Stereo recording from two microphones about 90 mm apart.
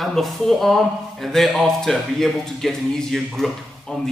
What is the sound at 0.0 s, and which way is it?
A man's voice, centre (ahead or behind).